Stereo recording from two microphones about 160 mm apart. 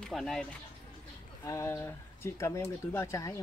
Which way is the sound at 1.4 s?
20° left (ahead or behind).